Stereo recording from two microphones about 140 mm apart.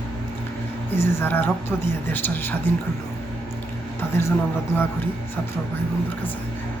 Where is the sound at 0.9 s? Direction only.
15° left (ahead or behind).